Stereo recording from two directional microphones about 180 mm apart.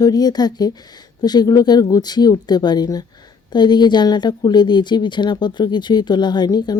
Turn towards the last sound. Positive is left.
turn(degrees=20)  # may be behind; listen again after turning